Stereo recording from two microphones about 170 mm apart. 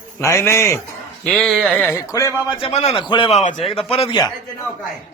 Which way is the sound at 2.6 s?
35° left (ahead or behind).